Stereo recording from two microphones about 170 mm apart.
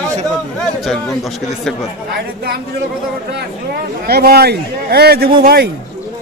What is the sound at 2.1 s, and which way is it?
Speech, 70° right (ahead or behind).